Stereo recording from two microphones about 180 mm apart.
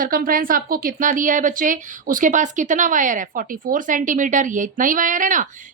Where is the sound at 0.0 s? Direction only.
50° right (ahead or behind).